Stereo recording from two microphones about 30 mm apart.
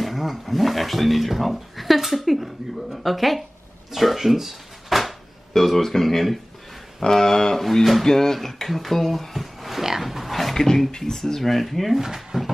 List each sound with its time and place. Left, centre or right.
0.0 s a woman's voice: centre
7.1 s speech: centre
10.0 s a sound: centre
11.0 s speech: centre
12.0 s speech: centre